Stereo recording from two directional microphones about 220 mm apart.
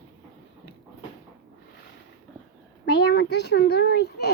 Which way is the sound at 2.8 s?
50° left (ahead or behind).